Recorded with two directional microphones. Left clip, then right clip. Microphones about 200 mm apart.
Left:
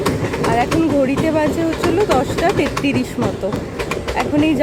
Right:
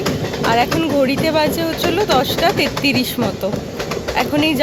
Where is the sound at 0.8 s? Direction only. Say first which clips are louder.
Even; 5° left (ahead or behind).